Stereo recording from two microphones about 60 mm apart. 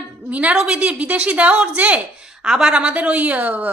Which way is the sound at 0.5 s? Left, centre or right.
Centre.